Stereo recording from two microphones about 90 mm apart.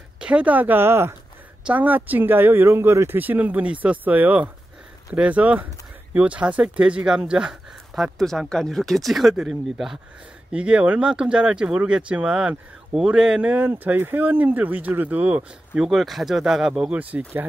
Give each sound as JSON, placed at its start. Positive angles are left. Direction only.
{"t": 0.2, "sound": "speech", "side_deg": -15}
{"t": 15.9, "sound": "speech", "side_deg": 0}